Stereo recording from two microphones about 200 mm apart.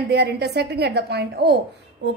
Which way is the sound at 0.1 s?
55° right (ahead or behind).